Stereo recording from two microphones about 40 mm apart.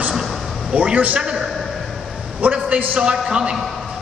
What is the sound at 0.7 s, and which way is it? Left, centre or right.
Speech, right.